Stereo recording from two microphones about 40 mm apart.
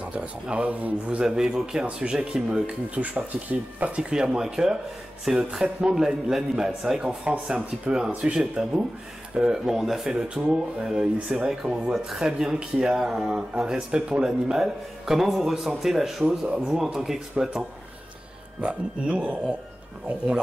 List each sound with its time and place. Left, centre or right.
0.2 s speech: right
1.2 s a man's voice: centre
2.6 s speech: right
4.1 s a man's voice: centre
7.0 s speech: right
8.4 s a man's voice: centre
10.1 s speech: right
11.9 s a man's voice: centre; by 14.2 s right
14.2 s a man's voice: centre
16.6 s a man's voice: centre
18.6 s speech: right